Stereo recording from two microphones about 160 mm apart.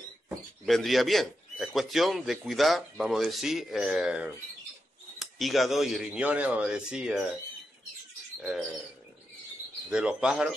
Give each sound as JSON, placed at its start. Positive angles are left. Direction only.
{"t": 0.7, "sound": "speech", "side_deg": 0}
{"t": 8.4, "sound": "speech", "side_deg": -5}
{"t": 9.8, "sound": "speech", "side_deg": -5}